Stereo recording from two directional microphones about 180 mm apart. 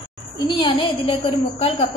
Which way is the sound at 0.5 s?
25° left (ahead or behind).